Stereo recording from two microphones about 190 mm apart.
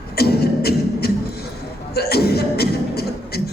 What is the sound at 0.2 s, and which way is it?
Beatboxing, 55° left (ahead or behind).